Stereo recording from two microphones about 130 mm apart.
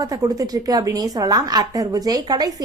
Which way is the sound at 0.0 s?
30° right (ahead or behind).